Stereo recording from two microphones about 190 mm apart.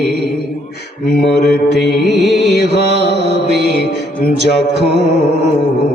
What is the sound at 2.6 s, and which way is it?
Music, 65° right (ahead or behind).